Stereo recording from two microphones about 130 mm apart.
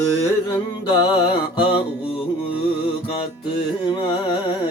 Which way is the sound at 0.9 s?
40° left (ahead or behind).